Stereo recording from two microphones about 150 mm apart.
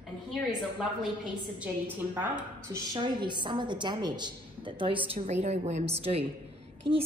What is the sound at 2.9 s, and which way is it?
A woman's voice, 30° right (ahead or behind).